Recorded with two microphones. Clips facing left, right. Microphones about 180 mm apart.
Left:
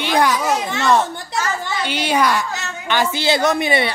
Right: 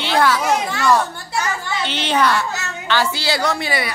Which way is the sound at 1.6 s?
10° left (ahead or behind).